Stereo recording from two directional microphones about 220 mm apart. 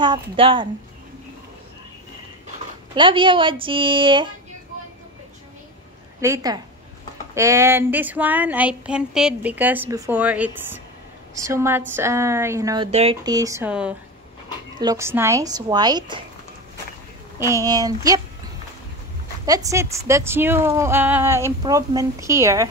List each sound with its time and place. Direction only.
0.0 s speech: 20° right (ahead or behind)
2.9 s speech: 20° right (ahead or behind)
6.2 s speech: 15° right (ahead or behind)
17.4 s speech: 15° right (ahead or behind)
19.4 s speech: 15° right (ahead or behind)